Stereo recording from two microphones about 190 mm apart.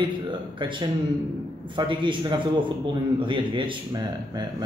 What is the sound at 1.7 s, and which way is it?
Speech, 25° right (ahead or behind).